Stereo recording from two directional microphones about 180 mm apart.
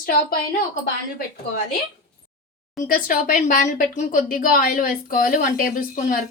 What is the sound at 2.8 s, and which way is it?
Speech, 50° left (ahead or behind).